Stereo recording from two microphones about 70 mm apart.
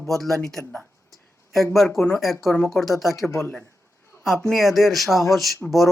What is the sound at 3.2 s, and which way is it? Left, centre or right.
Speech, left.